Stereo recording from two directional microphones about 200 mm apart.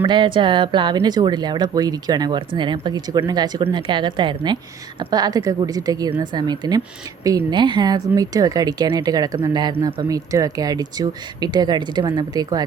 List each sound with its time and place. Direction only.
0.0 s speech: 25° right (ahead or behind)